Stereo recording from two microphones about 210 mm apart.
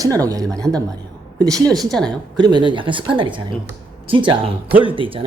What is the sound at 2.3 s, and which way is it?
Speech, 20° right (ahead or behind).